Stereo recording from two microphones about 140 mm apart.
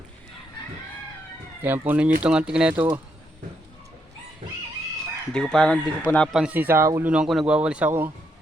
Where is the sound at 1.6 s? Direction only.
15° right (ahead or behind).